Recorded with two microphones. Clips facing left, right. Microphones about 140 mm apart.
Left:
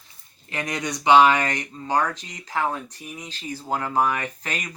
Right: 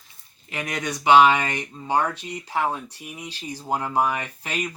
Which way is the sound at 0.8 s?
15° left (ahead or behind).